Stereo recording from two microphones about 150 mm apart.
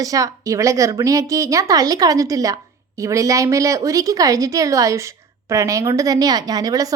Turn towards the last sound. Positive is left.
turn(degrees=-25)  # may be behind; listen again after turning